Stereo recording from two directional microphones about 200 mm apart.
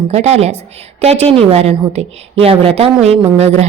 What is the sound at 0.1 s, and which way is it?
A woman's voice, 30° right (ahead or behind).